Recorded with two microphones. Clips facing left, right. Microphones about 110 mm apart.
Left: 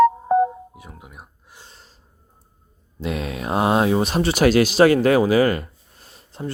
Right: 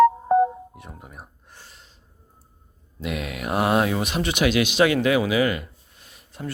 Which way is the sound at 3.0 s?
30° left (ahead or behind).